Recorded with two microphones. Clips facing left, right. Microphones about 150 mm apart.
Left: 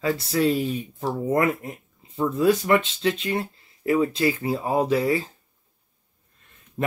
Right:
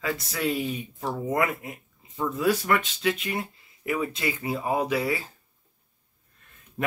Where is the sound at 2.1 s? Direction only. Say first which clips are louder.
Left 5 dB; 25° left (ahead or behind).